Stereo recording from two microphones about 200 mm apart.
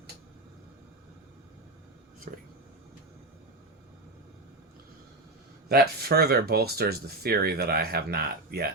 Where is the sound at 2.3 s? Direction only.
40° right (ahead or behind).